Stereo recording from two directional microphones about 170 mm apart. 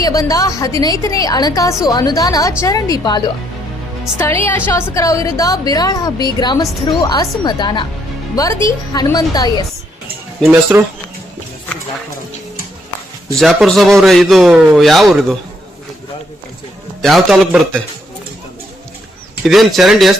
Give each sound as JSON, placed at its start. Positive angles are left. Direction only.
{"t": 0.0, "sound": "a woman's voice", "side_deg": 20}
{"t": 4.4, "sound": "a woman's voice", "side_deg": 15}
{"t": 8.9, "sound": "a woman's voice", "side_deg": 20}
{"t": 10.4, "sound": "speech", "side_deg": -10}
{"t": 13.4, "sound": "a man's voice", "side_deg": 0}
{"t": 17.0, "sound": "a man's voice", "side_deg": 0}
{"t": 19.5, "sound": "a man's voice", "side_deg": 0}